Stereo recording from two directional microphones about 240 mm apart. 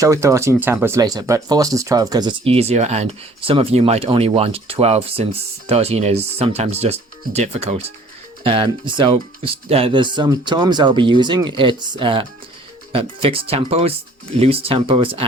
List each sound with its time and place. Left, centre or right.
0.0 s speech: centre